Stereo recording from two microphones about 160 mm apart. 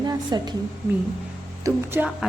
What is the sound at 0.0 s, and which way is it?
Speech, 25° right (ahead or behind).